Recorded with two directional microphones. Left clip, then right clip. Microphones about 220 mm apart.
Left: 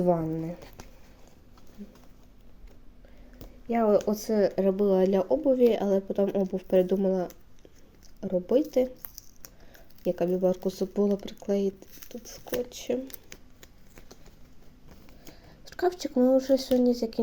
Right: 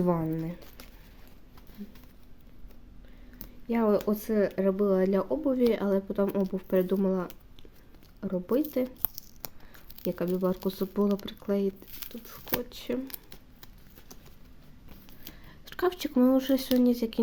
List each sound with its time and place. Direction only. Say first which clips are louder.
0.0 s speech: left 3 dB; 20° right (ahead or behind)
3.3 s a sound: left 3 dB; 15° right (ahead or behind)
4.0 s speech: left 2 dB; 5° right (ahead or behind)
10.1 s speech: left 4 dB; 5° right (ahead or behind)
15.7 s speech: left 1 dB; 20° right (ahead or behind)